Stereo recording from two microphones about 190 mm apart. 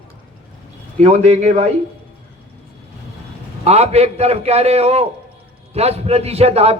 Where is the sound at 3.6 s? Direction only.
35° right (ahead or behind).